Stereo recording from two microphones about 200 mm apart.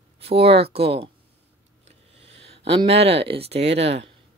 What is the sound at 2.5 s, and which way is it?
Speech, 30° right (ahead or behind).